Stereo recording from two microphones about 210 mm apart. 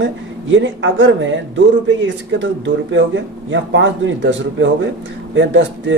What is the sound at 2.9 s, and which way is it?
Speech, 60° right (ahead or behind).